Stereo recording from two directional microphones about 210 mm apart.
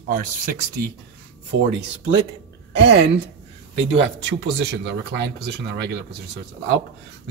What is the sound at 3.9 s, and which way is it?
Speech, 55° right (ahead or behind).